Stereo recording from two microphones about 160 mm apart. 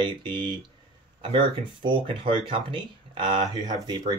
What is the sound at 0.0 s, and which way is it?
Speech, 30° right (ahead or behind).